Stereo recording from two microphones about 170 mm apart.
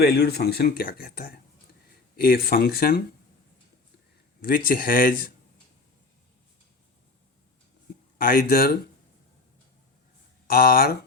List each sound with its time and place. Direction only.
0.0 s speech: 70° left (ahead or behind)
4.4 s speech: 60° left (ahead or behind)
8.2 s speech: 60° left (ahead or behind)
10.4 s speech: 60° left (ahead or behind)